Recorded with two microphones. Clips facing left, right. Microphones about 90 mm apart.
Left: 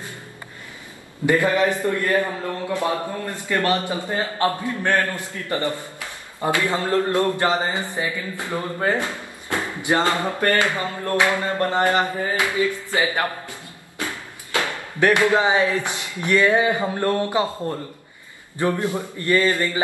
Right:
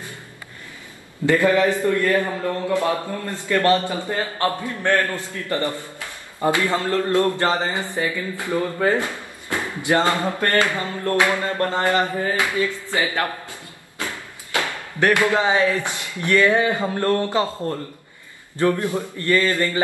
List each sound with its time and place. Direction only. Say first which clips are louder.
1.2 s a man's voice: right 2 dB; 20° left (ahead or behind)
14.6 s a man's voice: left 1 dB; 20° left (ahead or behind)